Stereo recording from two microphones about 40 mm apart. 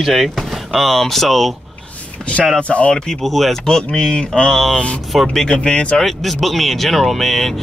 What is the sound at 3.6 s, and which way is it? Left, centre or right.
Speech, centre.